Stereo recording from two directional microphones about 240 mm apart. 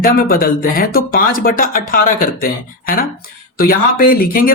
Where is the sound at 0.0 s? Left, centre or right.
Left.